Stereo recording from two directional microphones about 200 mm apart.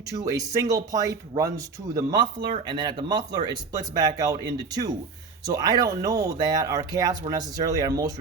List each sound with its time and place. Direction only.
0.1 s speech: 15° right (ahead or behind)